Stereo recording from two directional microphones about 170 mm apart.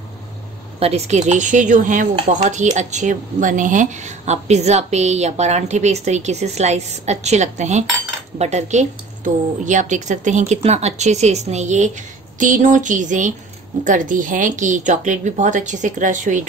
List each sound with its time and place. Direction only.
0.7 s speech: 40° right (ahead or behind)